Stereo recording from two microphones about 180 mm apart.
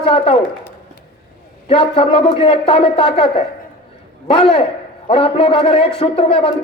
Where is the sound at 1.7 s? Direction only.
30° left (ahead or behind).